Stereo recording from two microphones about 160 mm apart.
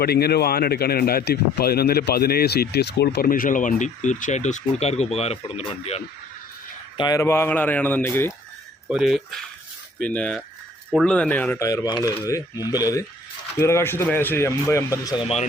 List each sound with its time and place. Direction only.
0.0 s speech: 80° left; by 6.0 s 40° left (ahead or behind)
6.9 s speech: 25° left (ahead or behind)
8.9 s speech: centre (ahead or behind); by 15.2 s 20° left (ahead or behind)